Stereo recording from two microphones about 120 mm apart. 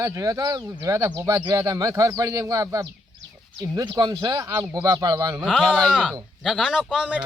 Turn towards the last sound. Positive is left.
turn(degrees=-5)  # may be behind; listen again after turning